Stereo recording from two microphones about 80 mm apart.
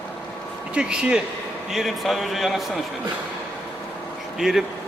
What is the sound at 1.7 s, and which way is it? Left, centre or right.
Speech, centre.